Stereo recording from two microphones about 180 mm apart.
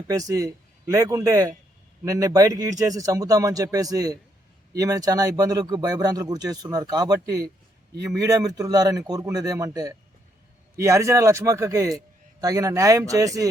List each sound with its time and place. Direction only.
0.1 s a man's voice: 20° right (ahead or behind)